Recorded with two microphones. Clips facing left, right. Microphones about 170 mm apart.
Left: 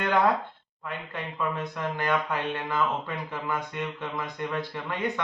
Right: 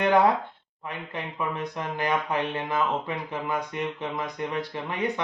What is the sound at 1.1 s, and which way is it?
Speech, 15° right (ahead or behind).